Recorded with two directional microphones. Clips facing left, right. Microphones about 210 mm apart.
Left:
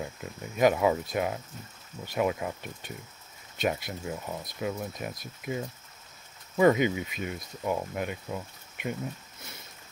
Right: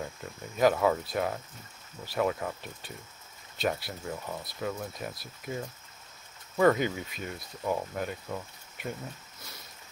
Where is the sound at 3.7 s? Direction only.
20° left (ahead or behind).